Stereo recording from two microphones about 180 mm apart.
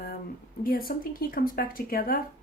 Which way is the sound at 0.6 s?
55° left (ahead or behind).